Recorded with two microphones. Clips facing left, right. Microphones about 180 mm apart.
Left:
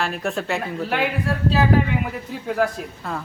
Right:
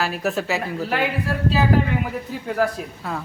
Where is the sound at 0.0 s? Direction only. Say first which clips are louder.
Right 1 dB; 5° right (ahead or behind).